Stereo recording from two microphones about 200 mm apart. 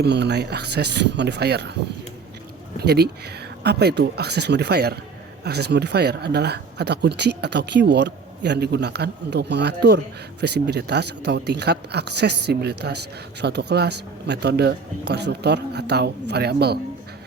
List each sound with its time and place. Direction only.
0.0 s speech: 60° right (ahead or behind)
2.7 s speech: 55° right (ahead or behind)